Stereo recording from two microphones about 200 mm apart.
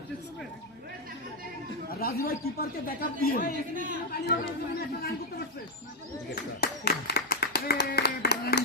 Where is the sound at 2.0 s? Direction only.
50° left (ahead or behind).